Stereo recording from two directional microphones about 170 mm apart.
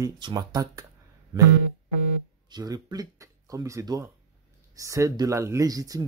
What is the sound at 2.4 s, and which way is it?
Speech, 25° right (ahead or behind).